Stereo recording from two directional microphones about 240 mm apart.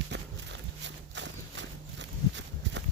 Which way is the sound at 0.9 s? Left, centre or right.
Right.